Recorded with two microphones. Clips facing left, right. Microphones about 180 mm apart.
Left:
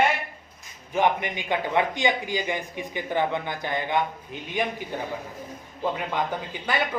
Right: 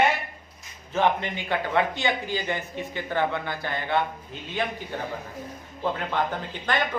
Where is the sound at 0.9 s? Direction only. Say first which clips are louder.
Even; 15° left (ahead or behind).